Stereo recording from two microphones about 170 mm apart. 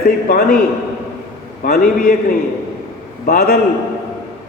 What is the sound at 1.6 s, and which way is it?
Speech, 60° left (ahead or behind).